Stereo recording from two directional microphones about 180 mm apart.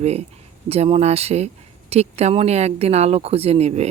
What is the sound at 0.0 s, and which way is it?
Speech, 35° right (ahead or behind).